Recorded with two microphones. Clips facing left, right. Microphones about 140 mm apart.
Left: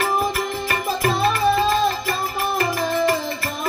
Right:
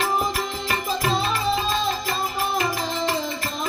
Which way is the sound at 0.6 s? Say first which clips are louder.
Left 2 dB; 55° left (ahead or behind).